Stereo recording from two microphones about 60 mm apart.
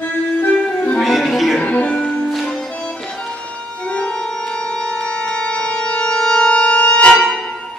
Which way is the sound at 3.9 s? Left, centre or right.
Centre.